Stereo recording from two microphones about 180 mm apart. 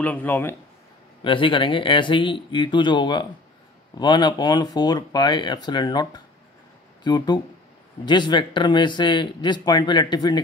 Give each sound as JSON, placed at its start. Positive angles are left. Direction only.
{"t": 0.0, "sound": "speech", "side_deg": 10}
{"t": 1.2, "sound": "speech", "side_deg": 30}